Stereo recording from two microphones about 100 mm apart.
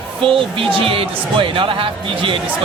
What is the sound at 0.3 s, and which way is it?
Speech, 65° right (ahead or behind).